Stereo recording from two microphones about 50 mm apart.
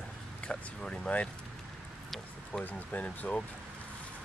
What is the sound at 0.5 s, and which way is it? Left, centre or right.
Speech, left.